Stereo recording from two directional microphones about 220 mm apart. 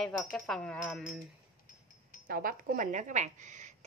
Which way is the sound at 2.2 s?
40° right (ahead or behind).